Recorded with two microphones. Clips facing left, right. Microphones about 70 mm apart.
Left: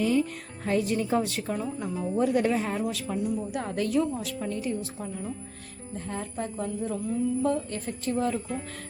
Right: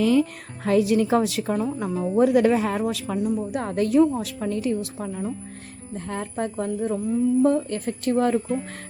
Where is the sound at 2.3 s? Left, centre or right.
Right.